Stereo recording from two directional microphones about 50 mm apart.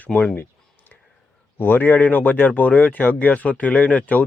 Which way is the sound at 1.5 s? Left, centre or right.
Left.